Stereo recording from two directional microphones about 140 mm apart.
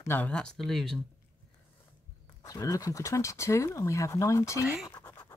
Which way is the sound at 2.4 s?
25° left (ahead or behind).